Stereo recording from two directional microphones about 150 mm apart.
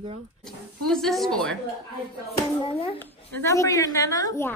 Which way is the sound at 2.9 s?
15° left (ahead or behind).